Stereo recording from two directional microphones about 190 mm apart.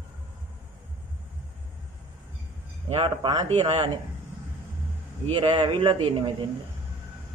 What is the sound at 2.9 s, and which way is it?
Speech, 25° right (ahead or behind).